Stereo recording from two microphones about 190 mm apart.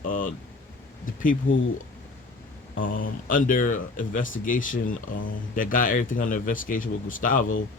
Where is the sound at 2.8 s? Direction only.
45° left (ahead or behind).